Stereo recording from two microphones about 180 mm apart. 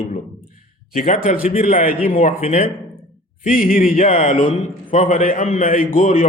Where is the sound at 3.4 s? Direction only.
50° left (ahead or behind).